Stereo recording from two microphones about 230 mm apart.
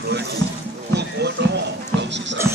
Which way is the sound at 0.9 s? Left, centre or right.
Right.